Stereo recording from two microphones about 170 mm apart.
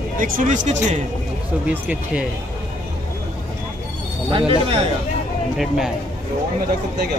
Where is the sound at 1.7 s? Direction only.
10° right (ahead or behind).